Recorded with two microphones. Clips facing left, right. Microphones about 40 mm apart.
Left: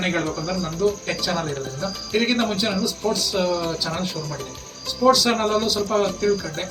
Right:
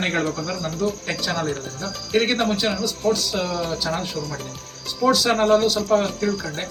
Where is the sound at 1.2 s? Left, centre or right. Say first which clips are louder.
Even; centre.